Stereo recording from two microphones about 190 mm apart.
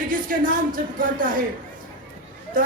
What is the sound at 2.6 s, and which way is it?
Speech, 45° right (ahead or behind).